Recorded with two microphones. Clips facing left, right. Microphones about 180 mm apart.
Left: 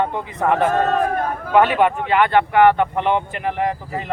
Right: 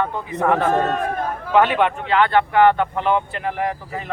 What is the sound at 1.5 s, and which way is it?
Speech, 50° left (ahead or behind).